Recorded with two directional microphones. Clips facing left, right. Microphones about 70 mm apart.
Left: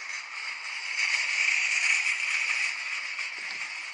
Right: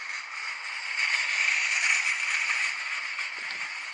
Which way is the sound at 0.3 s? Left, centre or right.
Right.